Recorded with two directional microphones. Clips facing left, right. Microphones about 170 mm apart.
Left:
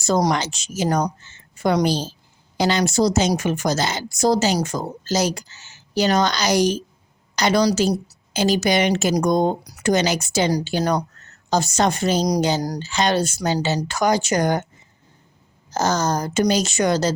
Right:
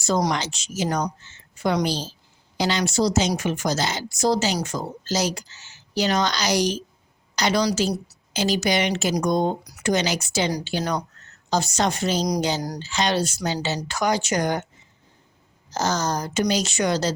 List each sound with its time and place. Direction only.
0.1 s a woman's voice: 45° left (ahead or behind)
8.3 s a woman's voice: 50° left (ahead or behind)
12.6 s speech: 35° left (ahead or behind)
12.9 s a woman's voice: 50° left (ahead or behind)
15.7 s a woman's voice: 50° left (ahead or behind)